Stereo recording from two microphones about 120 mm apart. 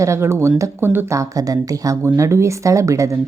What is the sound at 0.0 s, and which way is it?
A woman's voice, 25° right (ahead or behind).